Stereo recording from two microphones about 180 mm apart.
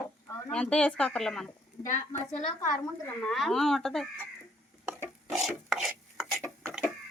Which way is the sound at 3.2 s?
Centre (ahead or behind).